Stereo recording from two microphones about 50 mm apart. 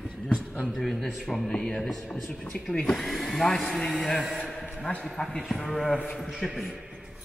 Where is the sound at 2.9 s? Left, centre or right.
Centre.